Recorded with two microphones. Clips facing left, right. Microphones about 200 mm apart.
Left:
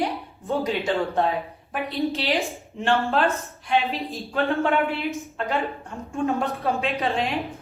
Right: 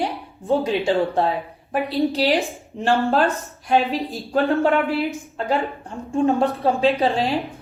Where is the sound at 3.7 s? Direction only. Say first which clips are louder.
Right 4 dB; 35° right (ahead or behind).